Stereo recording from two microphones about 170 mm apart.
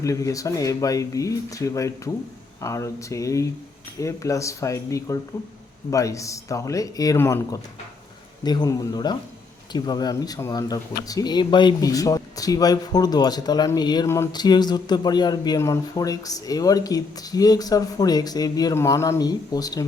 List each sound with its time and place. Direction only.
0.0 s speech: 20° left (ahead or behind)